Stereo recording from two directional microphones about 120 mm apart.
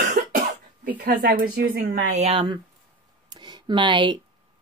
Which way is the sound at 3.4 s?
40° right (ahead or behind).